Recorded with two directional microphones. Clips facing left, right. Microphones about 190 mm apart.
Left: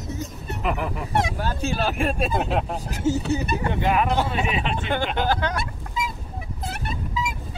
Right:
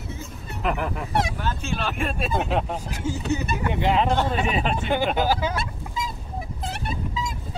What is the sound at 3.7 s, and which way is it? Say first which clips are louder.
Speech: right 1 dB; 25° right (ahead or behind).